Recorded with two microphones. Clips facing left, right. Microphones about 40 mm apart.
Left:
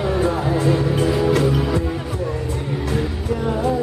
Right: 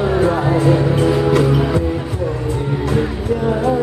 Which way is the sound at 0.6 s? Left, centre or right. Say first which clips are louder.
Right 3 dB; centre.